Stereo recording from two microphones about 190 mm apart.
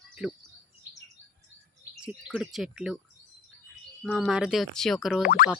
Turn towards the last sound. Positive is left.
turn(degrees=50)  # may be behind; listen again after turning